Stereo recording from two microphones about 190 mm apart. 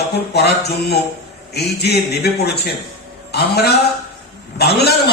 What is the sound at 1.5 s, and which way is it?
A man's voice, 60° left (ahead or behind).